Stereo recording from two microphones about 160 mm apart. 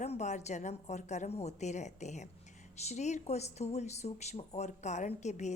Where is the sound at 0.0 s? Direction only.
45° left (ahead or behind).